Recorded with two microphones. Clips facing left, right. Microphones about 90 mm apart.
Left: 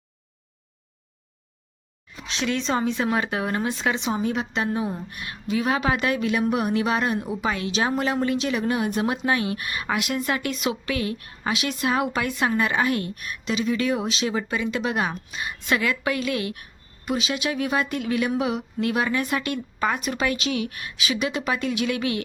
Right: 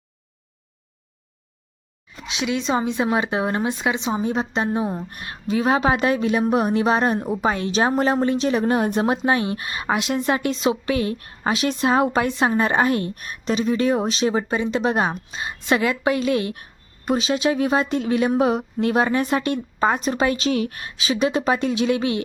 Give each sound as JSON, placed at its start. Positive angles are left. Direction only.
{"t": 2.2, "sound": "a woman's voice", "side_deg": -10}